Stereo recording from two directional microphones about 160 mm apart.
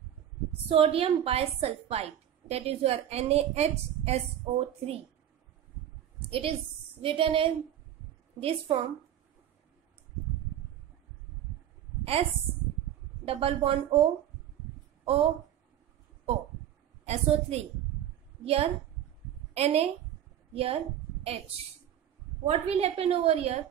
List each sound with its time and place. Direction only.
0.5 s a woman's voice: 35° right (ahead or behind)
6.1 s a sound: 35° right (ahead or behind)
7.0 s a woman's voice: 35° right (ahead or behind)
12.0 s a sound: 35° right (ahead or behind)
13.2 s a woman's voice: 35° right (ahead or behind)
15.0 s a woman's voice: 35° right (ahead or behind)
17.0 s a woman's voice: 40° right (ahead or behind)
22.5 s a woman's voice: 40° right (ahead or behind)